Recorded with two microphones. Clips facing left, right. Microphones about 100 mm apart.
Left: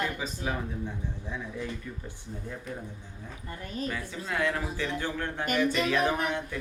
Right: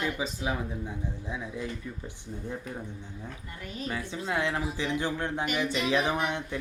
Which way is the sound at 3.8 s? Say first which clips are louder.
Right 3 dB; 25° right (ahead or behind).